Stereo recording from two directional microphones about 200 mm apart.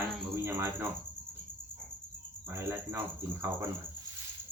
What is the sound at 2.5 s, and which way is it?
Speech, 15° right (ahead or behind).